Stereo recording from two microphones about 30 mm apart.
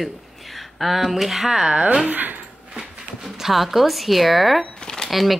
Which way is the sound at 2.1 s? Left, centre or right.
Right.